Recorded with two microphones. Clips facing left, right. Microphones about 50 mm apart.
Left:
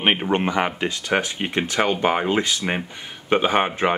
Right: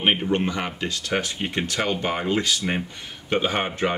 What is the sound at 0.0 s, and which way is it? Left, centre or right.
Speech, left.